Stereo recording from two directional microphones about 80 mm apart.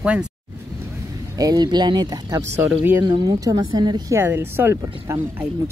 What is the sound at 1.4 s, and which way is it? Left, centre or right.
Speech, right.